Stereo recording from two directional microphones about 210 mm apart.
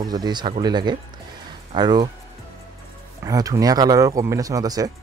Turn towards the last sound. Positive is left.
turn(degrees=-15)  # may be behind; listen again after turning